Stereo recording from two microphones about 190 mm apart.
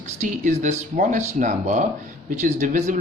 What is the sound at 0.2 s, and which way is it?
Speech, 40° right (ahead or behind).